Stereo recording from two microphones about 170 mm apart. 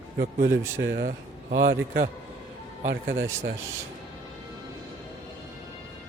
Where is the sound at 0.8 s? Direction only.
85° right.